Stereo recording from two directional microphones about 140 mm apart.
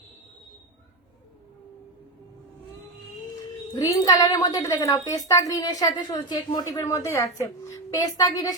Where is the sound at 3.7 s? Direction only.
25° left (ahead or behind).